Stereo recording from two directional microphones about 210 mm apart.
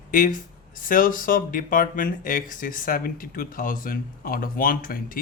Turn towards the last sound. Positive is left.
turn(degrees=40)  # may be behind; listen again after turning